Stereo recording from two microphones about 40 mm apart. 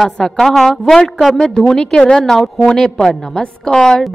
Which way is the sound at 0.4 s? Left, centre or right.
Centre.